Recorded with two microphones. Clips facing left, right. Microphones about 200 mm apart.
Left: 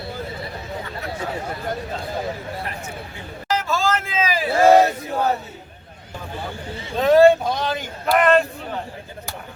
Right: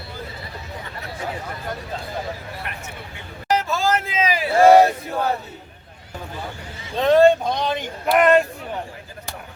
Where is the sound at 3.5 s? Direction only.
15° right (ahead or behind).